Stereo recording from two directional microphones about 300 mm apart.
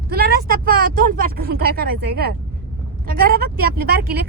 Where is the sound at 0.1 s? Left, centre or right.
Right.